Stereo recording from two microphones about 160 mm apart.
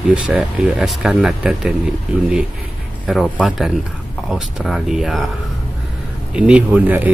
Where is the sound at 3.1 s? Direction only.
5° right (ahead or behind).